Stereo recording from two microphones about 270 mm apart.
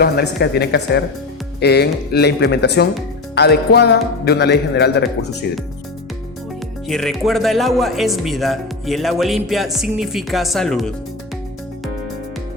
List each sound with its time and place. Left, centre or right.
0.0 s music: left
6.8 s speech: centre